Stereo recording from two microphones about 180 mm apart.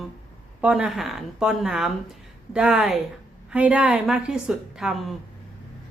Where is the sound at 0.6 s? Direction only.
5° right (ahead or behind).